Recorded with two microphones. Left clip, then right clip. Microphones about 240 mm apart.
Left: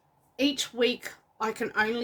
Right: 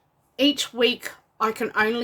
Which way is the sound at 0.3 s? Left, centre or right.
Centre.